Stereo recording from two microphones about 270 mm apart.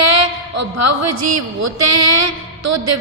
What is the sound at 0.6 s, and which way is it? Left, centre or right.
A woman's voice, right.